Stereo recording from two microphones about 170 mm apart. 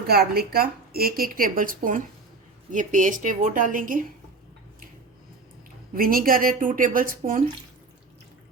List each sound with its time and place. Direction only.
0.1 s a woman's voice: 65° right (ahead or behind)
5.9 s a woman's voice: 60° right (ahead or behind)